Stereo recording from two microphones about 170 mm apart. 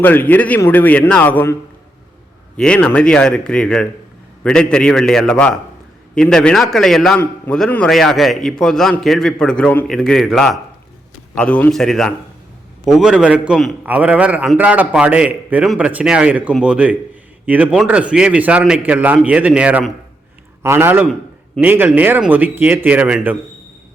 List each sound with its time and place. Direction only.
0.0 s a man's voice: 10° left (ahead or behind)
2.6 s a man's voice: 5° left (ahead or behind)